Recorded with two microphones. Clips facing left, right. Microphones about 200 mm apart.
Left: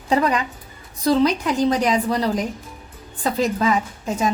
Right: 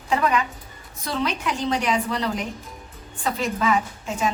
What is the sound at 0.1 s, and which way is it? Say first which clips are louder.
A woman's voice: left 3 dB; 35° left (ahead or behind).